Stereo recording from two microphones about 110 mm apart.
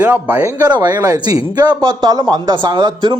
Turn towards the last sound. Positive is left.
turn(degrees=-45)  # may be behind; listen again after turning